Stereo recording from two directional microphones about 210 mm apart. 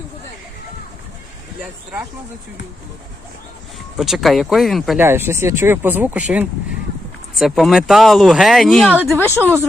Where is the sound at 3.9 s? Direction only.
Centre (ahead or behind).